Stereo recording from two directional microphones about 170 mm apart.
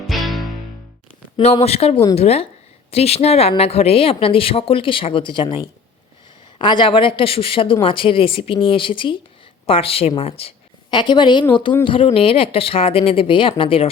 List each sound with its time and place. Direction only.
0.1 s music: centre (ahead or behind)
1.6 s a woman's voice: 35° left (ahead or behind)